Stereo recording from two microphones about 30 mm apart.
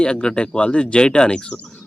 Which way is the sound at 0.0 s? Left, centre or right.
Left.